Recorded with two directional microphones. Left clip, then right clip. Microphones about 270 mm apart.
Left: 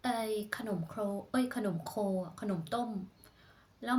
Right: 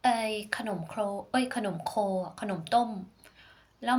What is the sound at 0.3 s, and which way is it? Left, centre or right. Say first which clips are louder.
A woman's voice: right 4 dB; centre.